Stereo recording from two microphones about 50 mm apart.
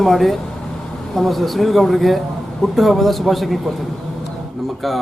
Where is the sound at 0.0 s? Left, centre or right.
Centre.